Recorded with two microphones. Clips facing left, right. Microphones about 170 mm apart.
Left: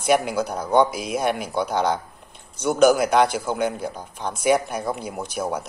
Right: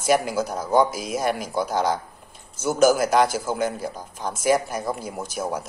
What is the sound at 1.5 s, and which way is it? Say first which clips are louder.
A man's voice: left 1 dB; 5° right (ahead or behind).